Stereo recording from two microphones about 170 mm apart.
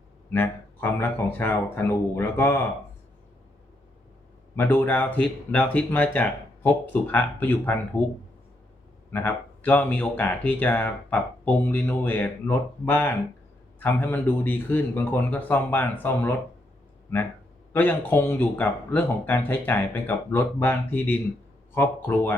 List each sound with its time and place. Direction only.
0.3 s speech: 15° left (ahead or behind)
4.5 s speech: 15° left (ahead or behind)
9.1 s speech: 10° left (ahead or behind)
17.7 s speech: 10° left (ahead or behind)